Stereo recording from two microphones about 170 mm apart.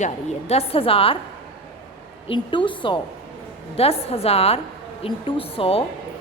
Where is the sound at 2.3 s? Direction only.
30° left (ahead or behind).